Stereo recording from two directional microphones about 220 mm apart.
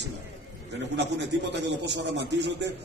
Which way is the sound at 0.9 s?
50° right (ahead or behind).